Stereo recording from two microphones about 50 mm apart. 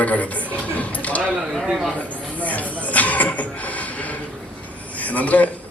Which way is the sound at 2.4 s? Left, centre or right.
Left.